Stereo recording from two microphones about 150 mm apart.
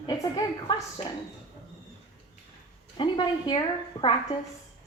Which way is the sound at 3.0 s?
30° left (ahead or behind).